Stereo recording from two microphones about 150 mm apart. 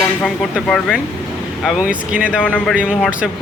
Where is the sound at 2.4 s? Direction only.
10° left (ahead or behind).